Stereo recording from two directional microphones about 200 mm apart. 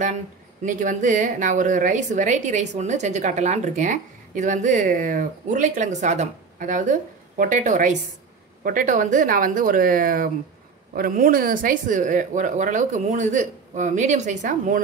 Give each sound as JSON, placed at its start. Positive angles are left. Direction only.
{"t": 0.7, "sound": "a woman's voice", "side_deg": -40}